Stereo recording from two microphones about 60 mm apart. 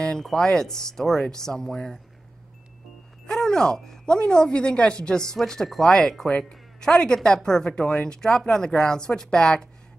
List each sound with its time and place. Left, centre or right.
0.0 s speech: centre
3.3 s speech: centre